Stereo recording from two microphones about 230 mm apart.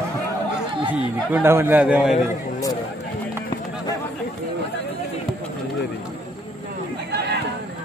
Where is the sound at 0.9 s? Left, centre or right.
Centre.